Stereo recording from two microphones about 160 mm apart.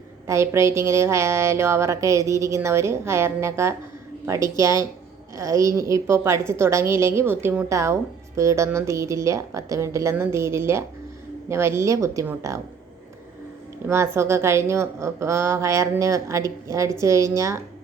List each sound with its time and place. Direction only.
0.3 s a woman's voice: 15° right (ahead or behind)
13.9 s a woman's voice: 15° right (ahead or behind)